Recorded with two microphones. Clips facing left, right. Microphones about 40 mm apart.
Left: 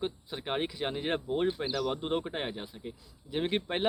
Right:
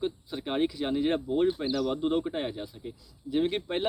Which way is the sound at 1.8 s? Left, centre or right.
Centre.